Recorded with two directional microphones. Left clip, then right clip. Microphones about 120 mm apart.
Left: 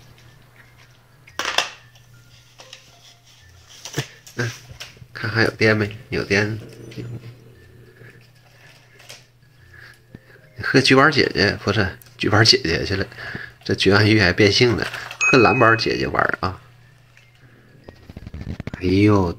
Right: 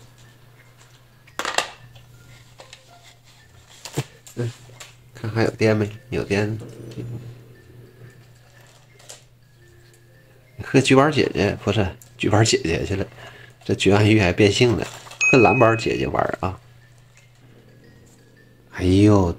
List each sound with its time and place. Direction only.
1.4 s crushing: 40° right (ahead or behind)
5.1 s speech: 5° right (ahead or behind)
10.6 s speech: 10° right (ahead or behind)
18.8 s speech: 10° right (ahead or behind)